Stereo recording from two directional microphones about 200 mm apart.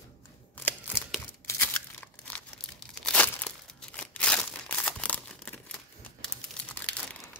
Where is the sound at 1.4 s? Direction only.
10° left (ahead or behind).